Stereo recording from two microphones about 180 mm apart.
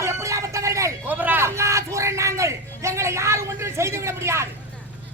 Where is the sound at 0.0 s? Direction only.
15° right (ahead or behind).